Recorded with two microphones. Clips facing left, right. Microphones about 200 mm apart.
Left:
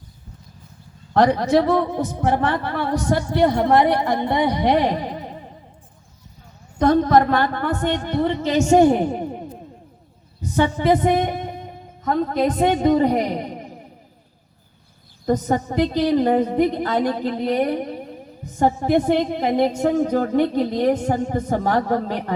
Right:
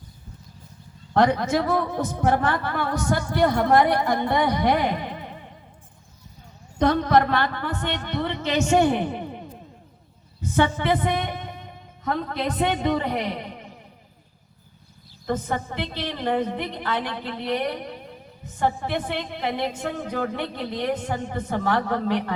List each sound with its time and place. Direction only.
1.1 s a woman's voice: 35° left (ahead or behind)
6.8 s speech: 45° left (ahead or behind)
10.5 s a woman's voice: 40° left (ahead or behind)
15.3 s a woman's voice: 40° left (ahead or behind)